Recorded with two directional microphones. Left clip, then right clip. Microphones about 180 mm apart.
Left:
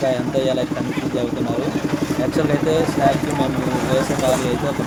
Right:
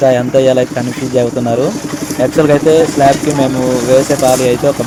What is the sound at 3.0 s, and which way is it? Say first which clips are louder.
Speech: right 7 dB; 45° right (ahead or behind).